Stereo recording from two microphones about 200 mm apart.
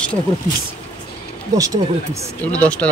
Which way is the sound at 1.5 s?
15° right (ahead or behind).